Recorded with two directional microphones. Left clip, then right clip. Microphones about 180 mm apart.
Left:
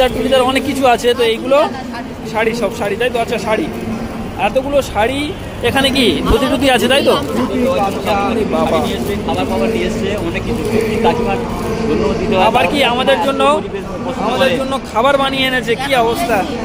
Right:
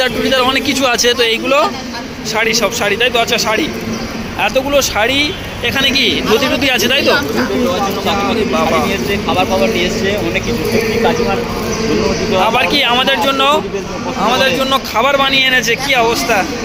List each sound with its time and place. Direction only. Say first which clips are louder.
0.0 s a man's voice: even; 10° left (ahead or behind)
5.6 s speech: even; 25° left (ahead or behind)
8.1 s a man's voice: even; 15° left (ahead or behind)
12.4 s a man's voice: left 1 dB; centre (ahead or behind)
14.9 s a man's voice: even; 15° left (ahead or behind)